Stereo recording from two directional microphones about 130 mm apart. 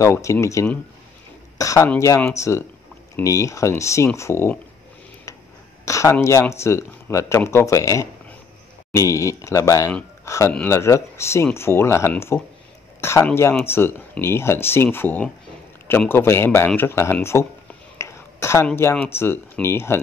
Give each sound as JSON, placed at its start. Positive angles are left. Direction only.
{"t": 0.0, "sound": "speech", "side_deg": 25}
{"t": 5.9, "sound": "speech", "side_deg": 25}
{"t": 17.9, "sound": "throat clearing", "side_deg": 20}
{"t": 18.8, "sound": "speech", "side_deg": 20}